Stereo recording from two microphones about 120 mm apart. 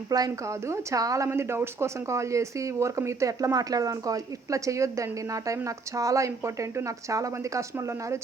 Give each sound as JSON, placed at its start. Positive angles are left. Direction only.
{"t": 0.1, "sound": "speech", "side_deg": -30}